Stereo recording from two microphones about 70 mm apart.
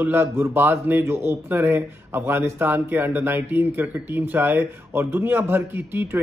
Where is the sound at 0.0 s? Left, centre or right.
Right.